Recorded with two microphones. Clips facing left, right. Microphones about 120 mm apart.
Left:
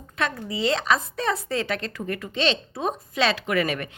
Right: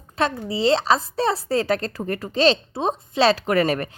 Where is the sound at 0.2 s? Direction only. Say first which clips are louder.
Right 4 dB; 30° right (ahead or behind).